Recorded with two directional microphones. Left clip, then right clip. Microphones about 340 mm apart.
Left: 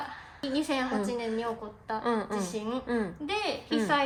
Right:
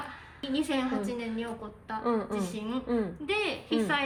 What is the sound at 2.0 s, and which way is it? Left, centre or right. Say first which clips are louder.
Speech: right 1 dB; centre.